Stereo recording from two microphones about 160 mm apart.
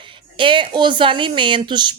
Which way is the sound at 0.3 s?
30° right (ahead or behind).